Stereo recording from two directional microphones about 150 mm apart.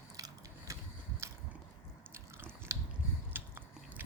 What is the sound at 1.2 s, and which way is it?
Biting, 20° right (ahead or behind).